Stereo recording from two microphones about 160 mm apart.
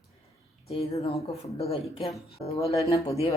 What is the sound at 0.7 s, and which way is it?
A man's voice, 40° left (ahead or behind).